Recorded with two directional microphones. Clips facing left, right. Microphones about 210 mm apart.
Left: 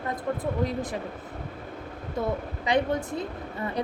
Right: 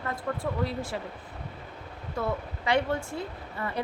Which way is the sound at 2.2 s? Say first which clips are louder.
Left 2 dB; 20° left (ahead or behind).